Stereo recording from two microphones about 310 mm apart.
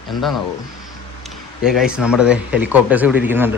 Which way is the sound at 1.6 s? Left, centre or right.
Centre.